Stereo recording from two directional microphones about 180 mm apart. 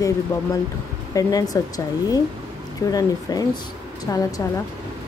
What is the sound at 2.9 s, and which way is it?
Speech, 20° left (ahead or behind).